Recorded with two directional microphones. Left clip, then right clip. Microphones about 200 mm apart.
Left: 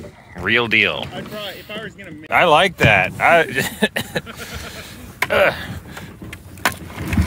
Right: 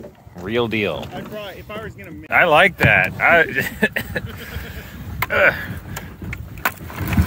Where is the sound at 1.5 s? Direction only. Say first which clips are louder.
Left 2 dB; 35° left (ahead or behind).